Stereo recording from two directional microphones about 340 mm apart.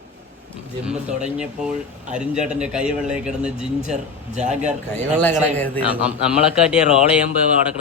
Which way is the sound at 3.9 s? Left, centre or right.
Right.